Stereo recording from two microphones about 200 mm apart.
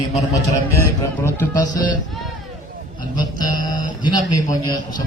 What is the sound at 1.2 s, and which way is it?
Speech, 15° left (ahead or behind).